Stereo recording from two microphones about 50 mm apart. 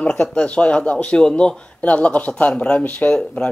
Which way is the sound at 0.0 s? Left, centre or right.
Centre.